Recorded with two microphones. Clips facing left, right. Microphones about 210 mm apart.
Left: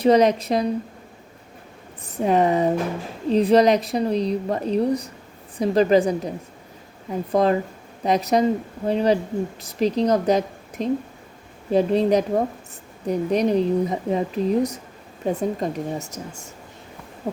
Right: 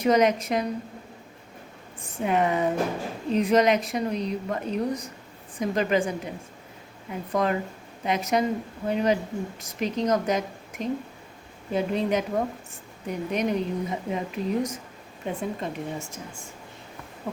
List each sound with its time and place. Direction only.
0.0 s a woman's voice: 35° left (ahead or behind)
2.1 s a woman's voice: 35° left (ahead or behind)
17.2 s a sound: 45° left (ahead or behind)